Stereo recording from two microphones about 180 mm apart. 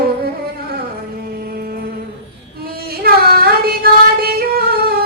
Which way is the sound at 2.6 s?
55° right (ahead or behind).